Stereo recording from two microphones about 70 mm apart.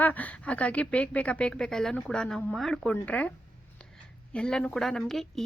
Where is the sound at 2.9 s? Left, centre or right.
Centre.